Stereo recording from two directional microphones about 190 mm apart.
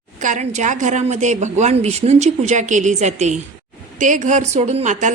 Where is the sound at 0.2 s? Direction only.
40° right (ahead or behind).